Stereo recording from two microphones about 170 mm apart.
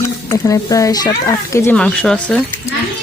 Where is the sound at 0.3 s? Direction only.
20° left (ahead or behind).